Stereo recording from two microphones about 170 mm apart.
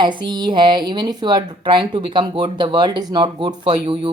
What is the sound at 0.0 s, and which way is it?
A woman's voice, 25° right (ahead or behind).